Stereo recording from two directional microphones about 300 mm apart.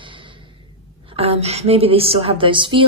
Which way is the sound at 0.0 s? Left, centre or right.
Centre.